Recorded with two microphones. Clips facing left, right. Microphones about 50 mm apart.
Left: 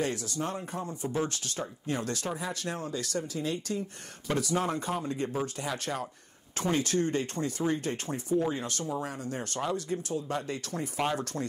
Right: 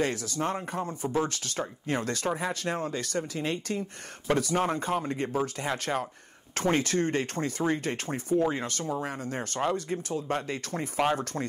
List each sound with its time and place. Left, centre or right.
0.0 s speech: right
11.0 s speech: right